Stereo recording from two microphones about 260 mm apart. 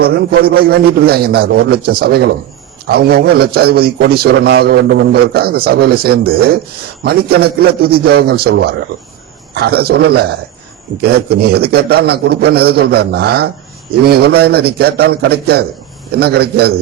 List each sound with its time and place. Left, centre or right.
0.0 s a man's voice: right